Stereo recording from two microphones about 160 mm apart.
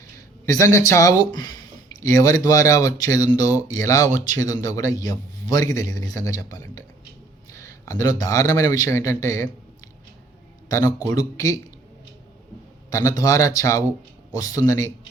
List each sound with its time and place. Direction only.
0.4 s a man's voice: 20° left (ahead or behind)
12.9 s speech: 20° left (ahead or behind)